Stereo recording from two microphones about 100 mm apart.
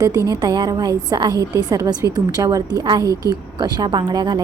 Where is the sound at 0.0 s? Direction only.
35° right (ahead or behind).